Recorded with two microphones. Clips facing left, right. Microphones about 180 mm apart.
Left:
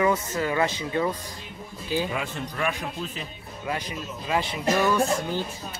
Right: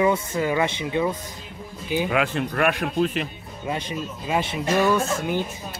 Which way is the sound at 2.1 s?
85° right.